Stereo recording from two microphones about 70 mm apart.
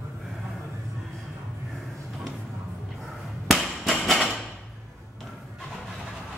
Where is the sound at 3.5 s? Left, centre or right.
Centre.